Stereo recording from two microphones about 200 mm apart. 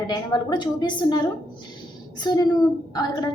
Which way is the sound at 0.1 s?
20° left (ahead or behind).